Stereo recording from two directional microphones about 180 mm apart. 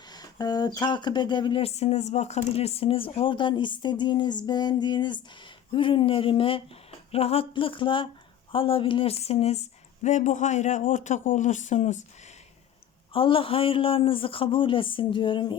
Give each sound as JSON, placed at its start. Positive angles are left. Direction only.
{"t": 0.1, "sound": "speech", "side_deg": 20}
{"t": 13.1, "sound": "speech", "side_deg": 30}